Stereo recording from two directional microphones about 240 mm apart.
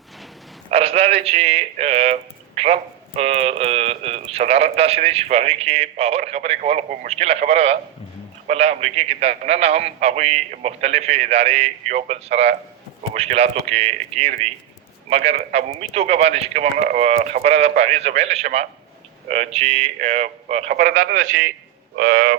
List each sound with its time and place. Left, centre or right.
0.7 s a man's voice: right
2.6 s a sound: right
3.2 s a man's voice: right
22.1 s speech: right